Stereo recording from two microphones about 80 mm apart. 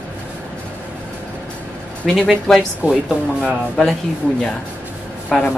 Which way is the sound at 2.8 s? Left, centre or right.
Right.